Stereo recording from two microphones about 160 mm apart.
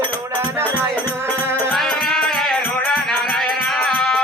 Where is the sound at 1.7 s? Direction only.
Centre (ahead or behind).